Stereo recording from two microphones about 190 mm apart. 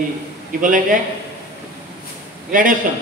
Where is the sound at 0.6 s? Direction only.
45° right (ahead or behind).